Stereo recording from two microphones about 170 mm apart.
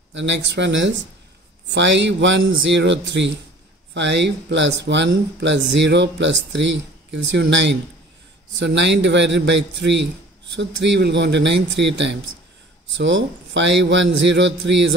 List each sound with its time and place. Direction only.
0.1 s speech: 90° right